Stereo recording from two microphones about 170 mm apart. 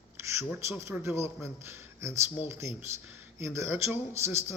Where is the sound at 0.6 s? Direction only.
15° right (ahead or behind).